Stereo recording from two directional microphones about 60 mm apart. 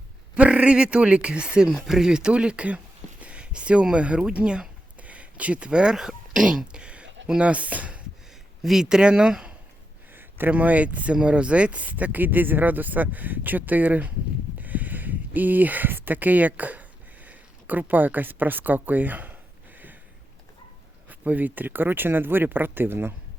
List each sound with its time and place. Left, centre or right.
0.3 s speech: right
8.6 s speech: centre
10.1 s speech: right
21.1 s speech: right